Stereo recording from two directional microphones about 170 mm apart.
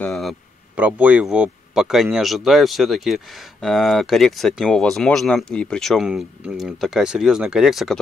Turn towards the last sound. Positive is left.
turn(degrees=0)  # may be behind; listen again after turning